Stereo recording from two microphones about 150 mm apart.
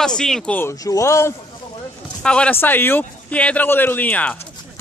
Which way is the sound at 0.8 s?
20° left (ahead or behind).